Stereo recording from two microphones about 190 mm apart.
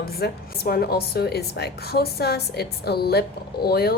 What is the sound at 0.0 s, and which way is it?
A woman's voice, 55° left (ahead or behind).